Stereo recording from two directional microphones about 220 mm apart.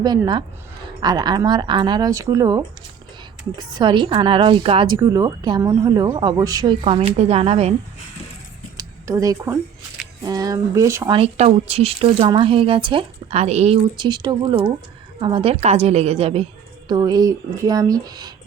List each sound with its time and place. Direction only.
0.0 s speech: 20° right (ahead or behind)
4.9 s speech: 15° right (ahead or behind)
8.8 s a sound: 15° right (ahead or behind)
10.2 s speech: 15° right (ahead or behind)
11.2 s speech: 25° right (ahead or behind)